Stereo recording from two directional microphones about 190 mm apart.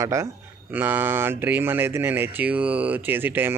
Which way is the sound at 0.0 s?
15° right (ahead or behind).